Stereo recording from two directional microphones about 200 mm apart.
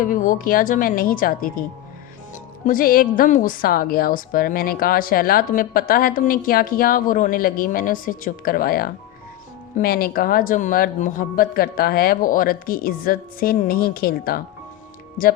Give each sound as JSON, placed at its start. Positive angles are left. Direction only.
{"t": 0.0, "sound": "a woman's voice", "side_deg": 40}
{"t": 2.6, "sound": "a woman's voice", "side_deg": 45}